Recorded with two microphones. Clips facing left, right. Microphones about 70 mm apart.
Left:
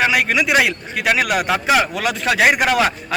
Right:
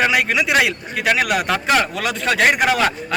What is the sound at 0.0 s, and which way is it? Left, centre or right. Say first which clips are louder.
Speech: left 1 dB; centre.